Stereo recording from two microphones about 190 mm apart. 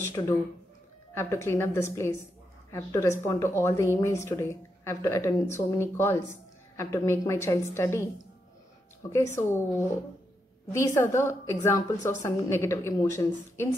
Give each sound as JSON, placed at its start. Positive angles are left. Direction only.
{"t": 0.2, "sound": "a woman's voice", "side_deg": 15}
{"t": 9.1, "sound": "a woman's voice", "side_deg": 15}
{"t": 11.0, "sound": "a woman's voice", "side_deg": 15}